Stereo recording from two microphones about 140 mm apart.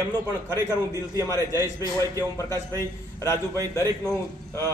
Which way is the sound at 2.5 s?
25° right (ahead or behind).